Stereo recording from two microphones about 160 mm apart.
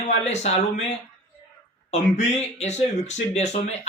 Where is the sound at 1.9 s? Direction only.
45° left (ahead or behind).